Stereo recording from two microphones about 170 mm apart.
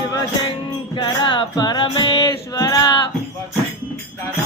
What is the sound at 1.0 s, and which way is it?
Music, 30° left (ahead or behind).